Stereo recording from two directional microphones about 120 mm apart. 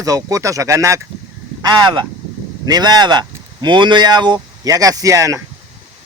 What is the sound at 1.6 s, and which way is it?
Speech, 35° right (ahead or behind).